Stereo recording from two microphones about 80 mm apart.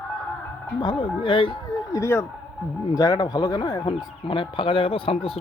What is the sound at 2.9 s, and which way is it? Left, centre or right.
Speech, left.